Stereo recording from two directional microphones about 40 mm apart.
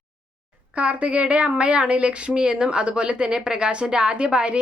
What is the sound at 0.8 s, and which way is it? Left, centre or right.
A woman's voice, right.